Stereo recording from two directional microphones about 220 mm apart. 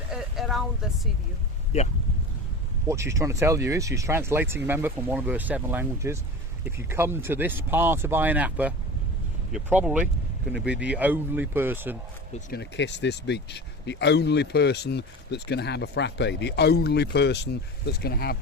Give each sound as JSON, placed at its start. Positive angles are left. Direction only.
{"t": 0.1, "sound": "vehicle", "side_deg": 0}
{"t": 2.8, "sound": "speech", "side_deg": -15}
{"t": 12.5, "sound": "speech", "side_deg": 50}